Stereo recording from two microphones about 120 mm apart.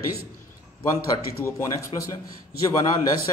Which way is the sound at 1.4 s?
25° left (ahead or behind).